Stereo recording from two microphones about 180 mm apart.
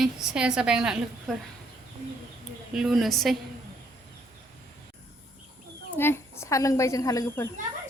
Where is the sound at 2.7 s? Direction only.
Centre (ahead or behind).